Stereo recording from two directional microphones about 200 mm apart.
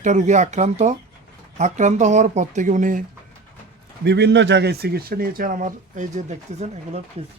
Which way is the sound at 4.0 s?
60° right (ahead or behind).